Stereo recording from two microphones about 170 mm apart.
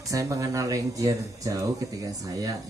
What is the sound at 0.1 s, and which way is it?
Speech, 20° right (ahead or behind).